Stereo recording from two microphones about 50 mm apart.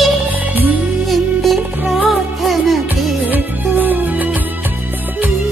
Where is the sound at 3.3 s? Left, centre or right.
Right.